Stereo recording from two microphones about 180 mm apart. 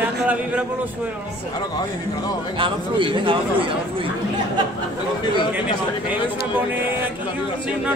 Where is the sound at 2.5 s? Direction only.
30° right (ahead or behind).